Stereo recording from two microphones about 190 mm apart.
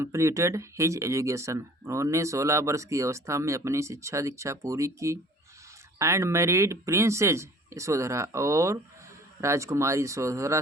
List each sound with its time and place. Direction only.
0.0 s speech: 15° right (ahead or behind)